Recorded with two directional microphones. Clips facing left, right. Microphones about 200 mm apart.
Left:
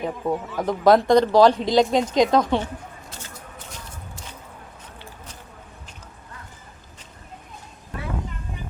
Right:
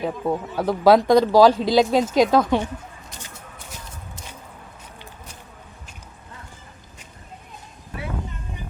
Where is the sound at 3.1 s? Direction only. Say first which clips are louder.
Left 1 dB; 15° right (ahead or behind).